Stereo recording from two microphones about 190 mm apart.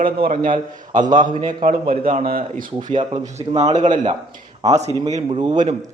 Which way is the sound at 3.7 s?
40° right (ahead or behind).